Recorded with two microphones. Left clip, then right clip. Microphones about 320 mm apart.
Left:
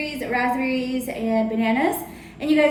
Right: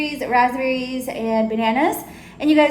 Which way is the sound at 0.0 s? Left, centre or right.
Right.